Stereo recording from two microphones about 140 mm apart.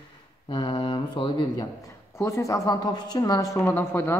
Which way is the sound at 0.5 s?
35° left (ahead or behind).